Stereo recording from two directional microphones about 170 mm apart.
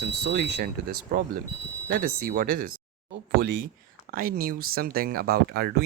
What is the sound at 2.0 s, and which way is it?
Speech, 55° right (ahead or behind).